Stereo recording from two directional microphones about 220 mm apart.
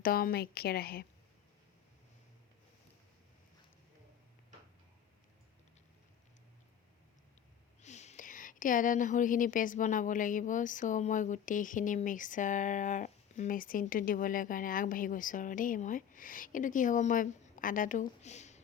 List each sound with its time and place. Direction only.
0.0 s a woman's voice: 40° left (ahead or behind)
7.8 s speech: 30° left (ahead or behind)